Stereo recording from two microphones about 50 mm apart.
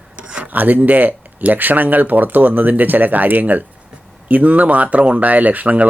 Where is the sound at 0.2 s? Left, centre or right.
Centre.